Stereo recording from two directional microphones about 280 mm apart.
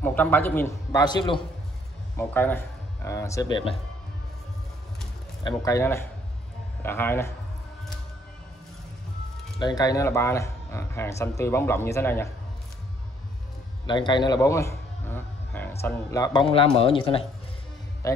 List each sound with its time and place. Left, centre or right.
0.0 s speech: centre
5.4 s speech: centre
9.6 s speech: centre
13.8 s a sound: centre
15.8 s a man's voice: centre